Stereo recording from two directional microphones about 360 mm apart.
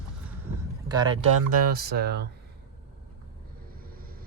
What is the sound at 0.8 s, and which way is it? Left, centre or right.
Speech, centre.